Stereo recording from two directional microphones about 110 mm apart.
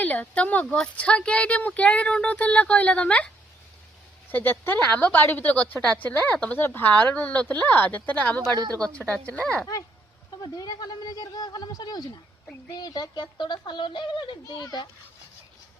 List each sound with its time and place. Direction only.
0.0 s speech: 15° left (ahead or behind)
8.5 s speech: 35° right (ahead or behind)
8.9 s speech: 10° left (ahead or behind)
10.4 s speech: 35° left (ahead or behind)